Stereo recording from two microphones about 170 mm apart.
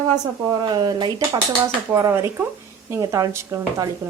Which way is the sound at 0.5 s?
25° right (ahead or behind).